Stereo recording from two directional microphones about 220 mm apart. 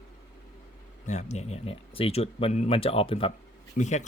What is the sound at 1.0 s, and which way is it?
Speech, 30° left (ahead or behind).